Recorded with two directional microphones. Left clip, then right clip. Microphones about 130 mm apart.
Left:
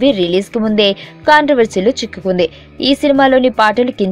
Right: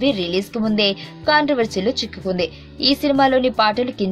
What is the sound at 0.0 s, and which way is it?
A woman's voice, 40° left (ahead or behind).